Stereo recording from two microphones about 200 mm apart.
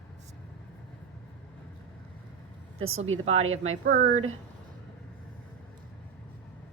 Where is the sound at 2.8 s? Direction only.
90° right.